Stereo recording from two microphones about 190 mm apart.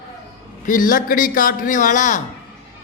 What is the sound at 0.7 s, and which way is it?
A man's voice, 45° left (ahead or behind).